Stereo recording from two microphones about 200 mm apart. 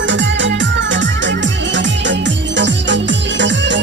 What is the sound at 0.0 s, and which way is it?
Music, 65° right (ahead or behind).